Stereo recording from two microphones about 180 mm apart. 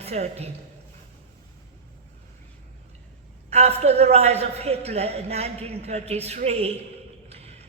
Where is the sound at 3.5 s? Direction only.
35° right (ahead or behind).